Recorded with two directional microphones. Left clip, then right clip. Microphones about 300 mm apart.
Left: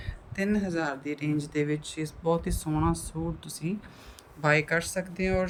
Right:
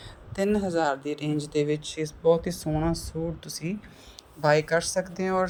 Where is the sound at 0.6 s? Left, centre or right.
Centre.